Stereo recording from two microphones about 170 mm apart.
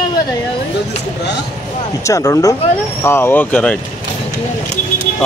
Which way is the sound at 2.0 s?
20° left (ahead or behind).